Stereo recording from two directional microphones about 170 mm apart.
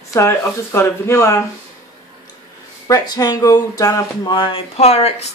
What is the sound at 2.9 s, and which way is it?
Speech, 20° left (ahead or behind).